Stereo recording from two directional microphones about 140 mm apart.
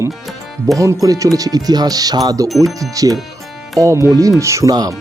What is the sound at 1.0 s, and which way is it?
Speech, 25° right (ahead or behind).